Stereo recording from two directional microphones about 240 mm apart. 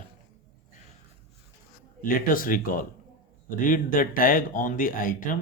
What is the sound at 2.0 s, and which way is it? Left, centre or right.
Speech, left.